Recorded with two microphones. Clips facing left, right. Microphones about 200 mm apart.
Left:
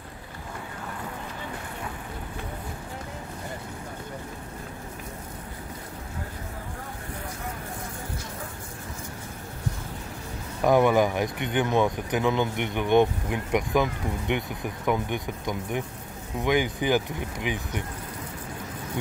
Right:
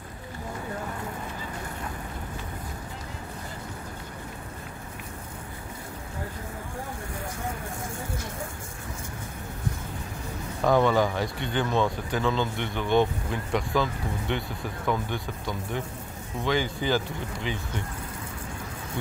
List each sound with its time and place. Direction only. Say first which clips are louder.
10.6 s speech: left 2 dB; 15° left (ahead or behind)